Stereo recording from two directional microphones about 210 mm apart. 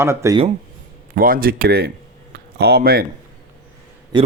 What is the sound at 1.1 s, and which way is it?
Speech, 45° right (ahead or behind).